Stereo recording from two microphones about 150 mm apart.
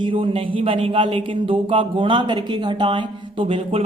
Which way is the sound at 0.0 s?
35° right (ahead or behind).